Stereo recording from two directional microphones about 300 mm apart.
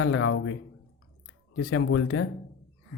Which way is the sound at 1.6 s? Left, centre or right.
Left.